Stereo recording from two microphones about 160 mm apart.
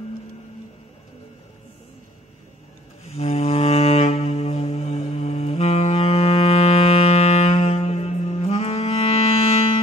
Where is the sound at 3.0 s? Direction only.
40° left (ahead or behind).